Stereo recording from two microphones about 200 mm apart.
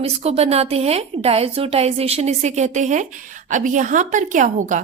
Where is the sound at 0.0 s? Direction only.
30° right (ahead or behind).